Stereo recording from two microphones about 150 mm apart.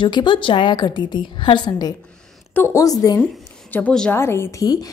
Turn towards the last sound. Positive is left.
turn(degrees=25)  # may be behind; listen again after turning